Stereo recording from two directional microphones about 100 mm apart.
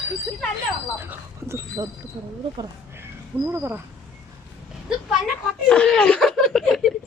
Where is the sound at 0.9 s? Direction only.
25° right (ahead or behind).